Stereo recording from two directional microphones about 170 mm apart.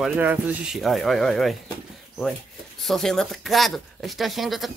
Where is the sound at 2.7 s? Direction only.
Centre (ahead or behind).